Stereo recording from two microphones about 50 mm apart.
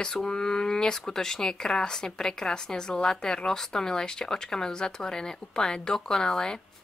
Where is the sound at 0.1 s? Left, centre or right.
Centre.